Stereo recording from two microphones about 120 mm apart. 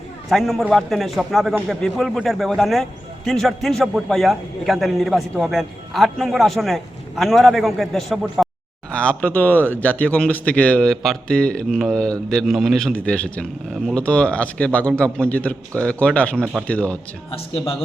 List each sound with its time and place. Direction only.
0.3 s a man's voice: centre (ahead or behind)
17.3 s speech: 50° left (ahead or behind)